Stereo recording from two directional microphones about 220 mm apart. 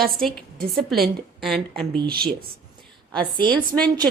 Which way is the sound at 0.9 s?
Centre (ahead or behind).